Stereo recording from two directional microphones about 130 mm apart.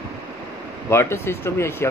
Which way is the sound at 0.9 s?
20° left (ahead or behind).